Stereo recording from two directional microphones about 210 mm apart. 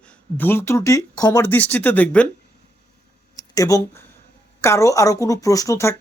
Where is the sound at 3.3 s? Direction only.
15° left (ahead or behind).